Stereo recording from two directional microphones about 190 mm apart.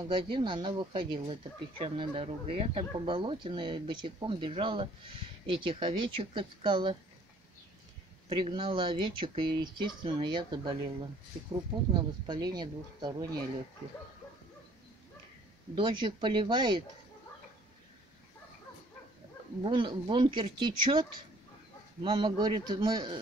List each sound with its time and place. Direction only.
0.1 s speech: 25° right (ahead or behind)
8.3 s speech: 25° right (ahead or behind)
11.9 s speech: 20° right (ahead or behind)
15.7 s speech: 25° right (ahead or behind)
19.6 s speech: 25° right (ahead or behind)